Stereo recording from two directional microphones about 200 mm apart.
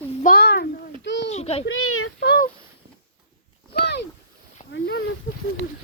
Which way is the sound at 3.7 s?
55° left (ahead or behind).